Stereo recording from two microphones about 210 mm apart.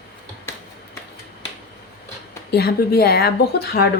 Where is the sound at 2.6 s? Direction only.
50° left (ahead or behind).